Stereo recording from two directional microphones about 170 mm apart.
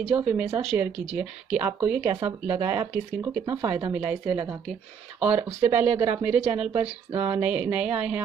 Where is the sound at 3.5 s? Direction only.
20° right (ahead or behind).